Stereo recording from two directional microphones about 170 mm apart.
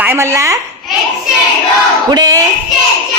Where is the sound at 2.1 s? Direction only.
20° right (ahead or behind).